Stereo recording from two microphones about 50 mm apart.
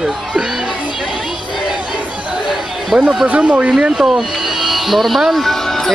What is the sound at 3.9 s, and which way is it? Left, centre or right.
Speech, centre.